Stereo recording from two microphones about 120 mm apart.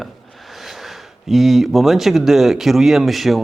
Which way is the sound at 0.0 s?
Centre (ahead or behind).